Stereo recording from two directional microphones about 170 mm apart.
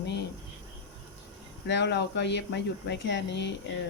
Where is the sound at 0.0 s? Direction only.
85° left.